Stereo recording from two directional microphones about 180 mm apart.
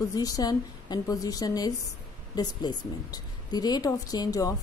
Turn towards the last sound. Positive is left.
turn(degrees=20)  # may be behind; listen again after turning